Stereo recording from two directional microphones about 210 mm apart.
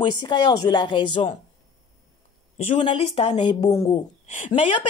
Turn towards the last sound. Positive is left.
turn(degrees=25)  # may be behind; listen again after turning